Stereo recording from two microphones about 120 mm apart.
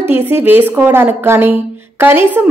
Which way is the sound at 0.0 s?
20° right (ahead or behind).